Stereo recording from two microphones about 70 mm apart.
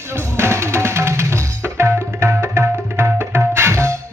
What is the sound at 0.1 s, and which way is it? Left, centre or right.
Music, right.